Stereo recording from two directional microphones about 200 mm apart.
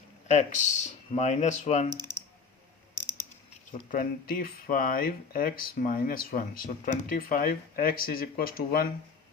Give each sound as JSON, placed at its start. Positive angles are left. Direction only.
{"t": 0.3, "sound": "speech", "side_deg": 35}
{"t": 3.7, "sound": "speech", "side_deg": 45}